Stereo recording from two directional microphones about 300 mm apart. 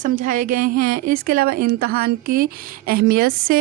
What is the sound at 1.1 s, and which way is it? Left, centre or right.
Speech, right.